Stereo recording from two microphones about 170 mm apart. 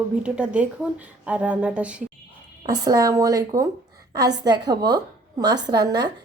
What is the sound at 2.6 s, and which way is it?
A woman's voice, 20° right (ahead or behind).